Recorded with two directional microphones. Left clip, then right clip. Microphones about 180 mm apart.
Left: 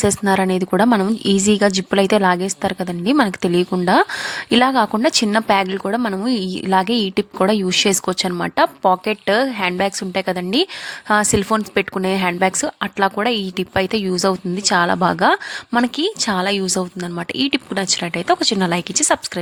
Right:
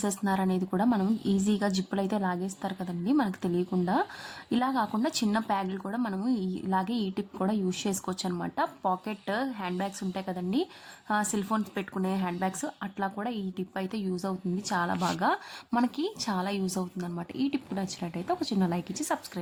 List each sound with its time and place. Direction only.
0.0 s a woman's voice: 35° left (ahead or behind)